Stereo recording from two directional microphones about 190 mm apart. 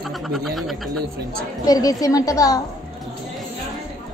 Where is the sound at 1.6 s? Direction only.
20° left (ahead or behind).